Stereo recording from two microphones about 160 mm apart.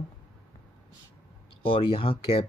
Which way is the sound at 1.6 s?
35° left (ahead or behind).